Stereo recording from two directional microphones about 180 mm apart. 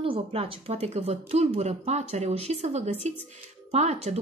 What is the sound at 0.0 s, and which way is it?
Speech, 30° right (ahead or behind).